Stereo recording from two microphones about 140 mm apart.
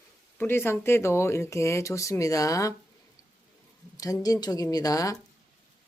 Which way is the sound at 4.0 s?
25° left (ahead or behind).